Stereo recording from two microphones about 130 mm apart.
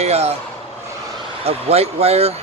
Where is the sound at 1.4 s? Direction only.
50° right (ahead or behind).